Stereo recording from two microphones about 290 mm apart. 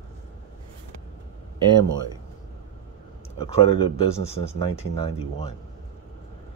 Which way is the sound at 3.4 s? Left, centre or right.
Centre.